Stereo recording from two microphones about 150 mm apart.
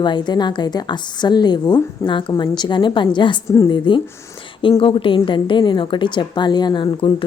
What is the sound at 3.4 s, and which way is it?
Speech, 20° left (ahead or behind).